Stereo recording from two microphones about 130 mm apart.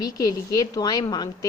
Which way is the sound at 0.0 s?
30° left (ahead or behind).